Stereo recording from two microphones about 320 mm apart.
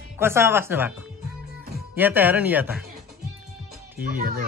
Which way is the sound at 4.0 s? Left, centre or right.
Right.